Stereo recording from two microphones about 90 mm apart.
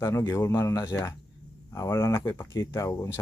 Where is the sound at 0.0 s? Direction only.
30° left (ahead or behind).